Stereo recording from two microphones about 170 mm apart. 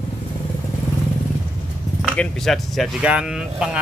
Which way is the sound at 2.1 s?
Centre (ahead or behind).